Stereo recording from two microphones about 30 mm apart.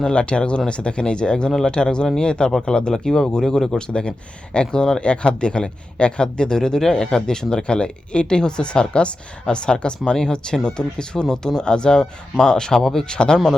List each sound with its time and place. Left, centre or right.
0.1 s speech: left
2.9 s speech: centre
4.9 s speech: left
12.8 s speech: centre
13.1 s speech: left